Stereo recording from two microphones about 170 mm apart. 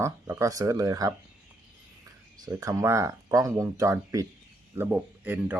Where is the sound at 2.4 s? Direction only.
20° right (ahead or behind).